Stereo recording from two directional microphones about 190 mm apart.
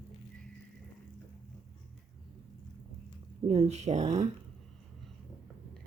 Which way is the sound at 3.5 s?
35° right (ahead or behind).